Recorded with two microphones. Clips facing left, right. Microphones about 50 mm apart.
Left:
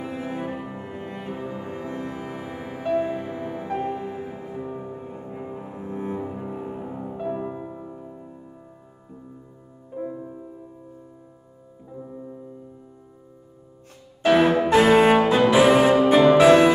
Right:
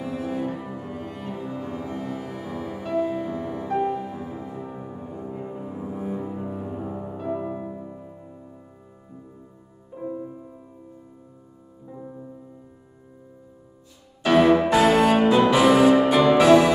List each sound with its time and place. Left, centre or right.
0.0 s music: left
4.6 s music: centre
5.9 s cello: left
6.9 s music: centre
9.9 s music: centre
14.3 s music: left